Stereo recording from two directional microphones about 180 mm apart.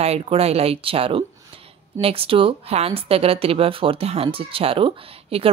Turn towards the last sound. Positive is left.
turn(degrees=-30)  # may be behind; listen again after turning